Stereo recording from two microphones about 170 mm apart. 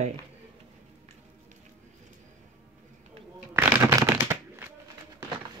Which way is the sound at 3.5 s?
10° right (ahead or behind).